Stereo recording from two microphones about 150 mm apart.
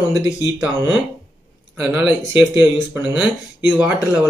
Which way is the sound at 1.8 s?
10° right (ahead or behind).